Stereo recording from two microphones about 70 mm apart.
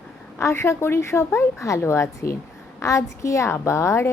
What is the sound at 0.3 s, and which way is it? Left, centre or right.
A woman's voice, left.